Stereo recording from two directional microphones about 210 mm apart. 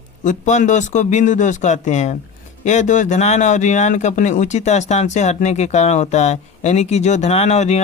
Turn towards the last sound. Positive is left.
turn(degrees=30)  # may be behind; listen again after turning